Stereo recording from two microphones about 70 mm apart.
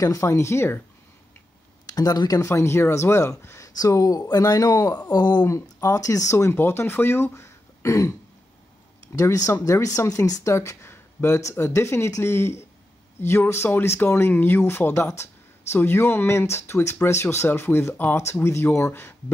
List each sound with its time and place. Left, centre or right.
0.0 s speech: left
1.9 s speech: left
3.6 s speech: left
5.1 s speech: left
5.5 s speech: left
6.3 s speech: left
7.3 s a sound: left
9.1 s speech: left
10.5 s speech: left